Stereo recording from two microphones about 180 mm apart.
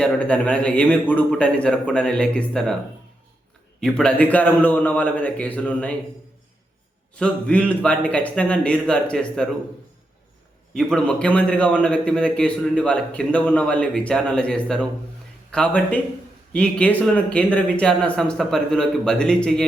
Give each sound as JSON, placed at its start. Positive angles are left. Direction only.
{"t": 0.0, "sound": "a man's voice", "side_deg": 5}
{"t": 3.8, "sound": "speech", "side_deg": 5}
{"t": 7.2, "sound": "speech", "side_deg": 5}
{"t": 10.8, "sound": "a man's voice", "side_deg": 5}